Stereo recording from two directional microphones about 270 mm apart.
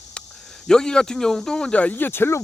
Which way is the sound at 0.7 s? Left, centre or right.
Centre.